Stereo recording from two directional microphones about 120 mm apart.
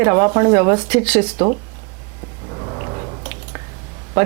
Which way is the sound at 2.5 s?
30° right (ahead or behind).